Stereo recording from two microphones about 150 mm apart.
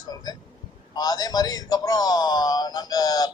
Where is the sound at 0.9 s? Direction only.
25° left (ahead or behind).